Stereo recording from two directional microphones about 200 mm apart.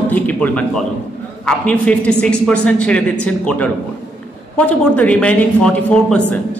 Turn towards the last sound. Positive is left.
turn(degrees=5)  # may be behind; listen again after turning